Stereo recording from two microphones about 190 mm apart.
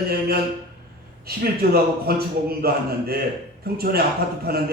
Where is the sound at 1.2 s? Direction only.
55° right (ahead or behind).